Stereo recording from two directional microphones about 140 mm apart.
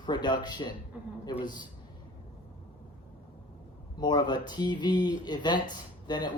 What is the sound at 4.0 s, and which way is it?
Speech, 30° left (ahead or behind).